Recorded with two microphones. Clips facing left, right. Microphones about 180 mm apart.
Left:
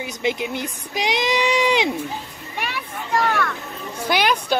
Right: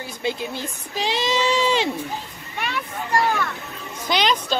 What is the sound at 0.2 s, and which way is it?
Speech, 20° left (ahead or behind).